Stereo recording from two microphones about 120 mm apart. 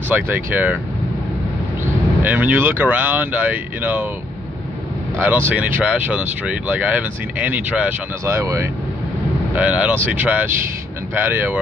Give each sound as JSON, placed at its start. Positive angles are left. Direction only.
{"t": 0.1, "sound": "speech", "side_deg": -15}
{"t": 2.2, "sound": "speech", "side_deg": -15}
{"t": 5.2, "sound": "speech", "side_deg": -15}
{"t": 8.3, "sound": "speech", "side_deg": -25}
{"t": 9.6, "sound": "speech", "side_deg": -10}